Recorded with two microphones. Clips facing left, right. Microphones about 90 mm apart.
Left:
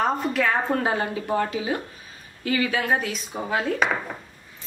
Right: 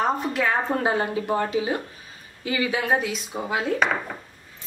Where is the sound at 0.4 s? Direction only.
20° right (ahead or behind).